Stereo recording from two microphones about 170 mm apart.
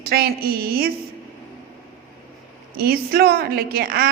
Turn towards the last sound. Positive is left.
turn(degrees=-60)  # may be behind; listen again after turning